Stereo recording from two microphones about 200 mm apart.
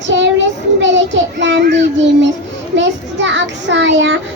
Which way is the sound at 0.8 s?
65° right (ahead or behind).